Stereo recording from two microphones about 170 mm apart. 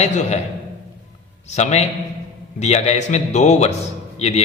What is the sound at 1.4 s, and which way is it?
A man's voice, 40° left (ahead or behind).